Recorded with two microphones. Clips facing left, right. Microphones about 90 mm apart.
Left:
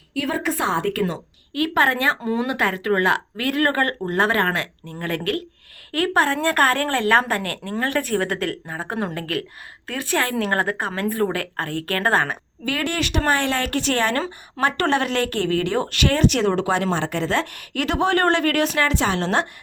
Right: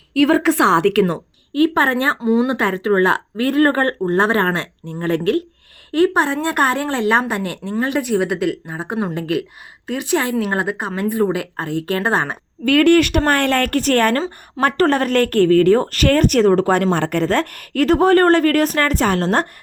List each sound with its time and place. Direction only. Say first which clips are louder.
0.1 s a woman's voice: right 10 dB; 90° right
1.5 s a woman's voice: right 4 dB; 30° right (ahead or behind)
2.2 s a woman's voice: right 7 dB; 15° right (ahead or behind)
2.5 s a woman's voice: right 4 dB; 25° right (ahead or behind)
12.6 s a woman's voice: right 12 dB; 55° right (ahead or behind)